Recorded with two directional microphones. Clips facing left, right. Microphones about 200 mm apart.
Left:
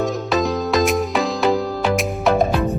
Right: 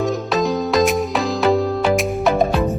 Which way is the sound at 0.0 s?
Centre (ahead or behind).